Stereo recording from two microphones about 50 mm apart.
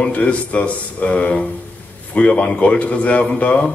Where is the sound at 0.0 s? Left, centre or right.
Left.